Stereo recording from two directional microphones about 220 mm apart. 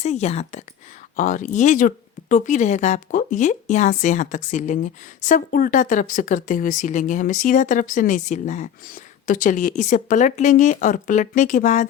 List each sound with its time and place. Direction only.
0.0 s a woman's voice: 30° left (ahead or behind)